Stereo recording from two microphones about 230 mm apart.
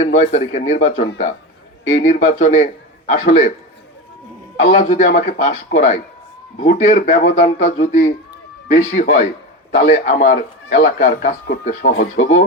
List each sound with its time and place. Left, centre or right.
0.0 s speech: left
4.7 s speech: left